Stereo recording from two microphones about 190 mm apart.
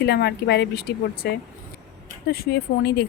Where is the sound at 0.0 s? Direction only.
60° left (ahead or behind).